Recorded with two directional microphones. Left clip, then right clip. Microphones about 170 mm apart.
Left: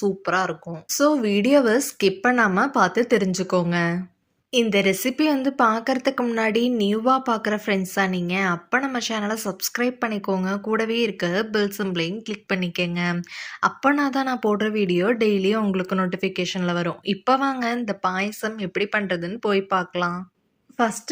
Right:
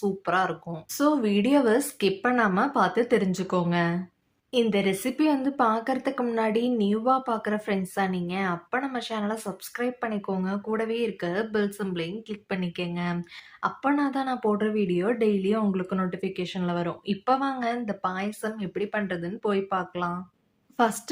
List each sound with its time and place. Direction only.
0.0 s a woman's voice: 15° left (ahead or behind)